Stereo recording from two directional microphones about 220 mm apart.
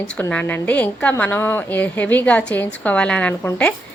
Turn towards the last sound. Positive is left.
turn(degrees=5)  # may be behind; listen again after turning